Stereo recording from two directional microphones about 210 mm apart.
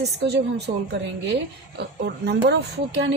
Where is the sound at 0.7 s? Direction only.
35° right (ahead or behind).